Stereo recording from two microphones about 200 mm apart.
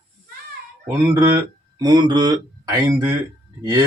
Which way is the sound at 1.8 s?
20° right (ahead or behind).